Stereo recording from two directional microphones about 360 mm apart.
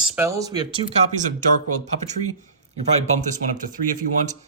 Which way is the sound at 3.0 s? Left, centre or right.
Centre.